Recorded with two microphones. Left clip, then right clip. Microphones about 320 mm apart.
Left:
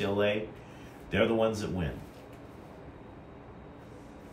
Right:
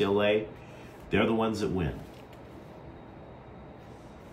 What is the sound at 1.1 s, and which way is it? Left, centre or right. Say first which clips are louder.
Speech: even; centre.